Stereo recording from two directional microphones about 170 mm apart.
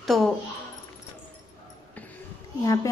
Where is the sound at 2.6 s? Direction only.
20° left (ahead or behind).